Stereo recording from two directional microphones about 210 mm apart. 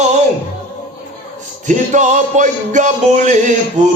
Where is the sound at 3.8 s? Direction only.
35° right (ahead or behind).